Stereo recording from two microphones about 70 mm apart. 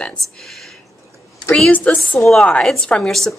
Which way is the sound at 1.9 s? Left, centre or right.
Centre.